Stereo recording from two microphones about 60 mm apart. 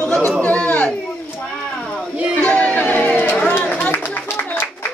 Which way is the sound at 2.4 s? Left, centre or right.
Left.